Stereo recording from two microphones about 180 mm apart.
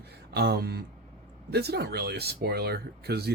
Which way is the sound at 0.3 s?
65° right (ahead or behind).